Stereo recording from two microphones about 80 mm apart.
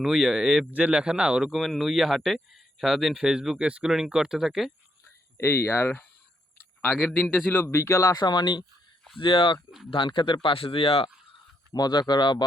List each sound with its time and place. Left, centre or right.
0.0 s speech: centre
0.7 s speech: centre
1.5 s speech: centre
5.0 s a sound: left
7.0 s speech: left
8.2 s speech: left
9.1 s speech: left
11.7 s speech: left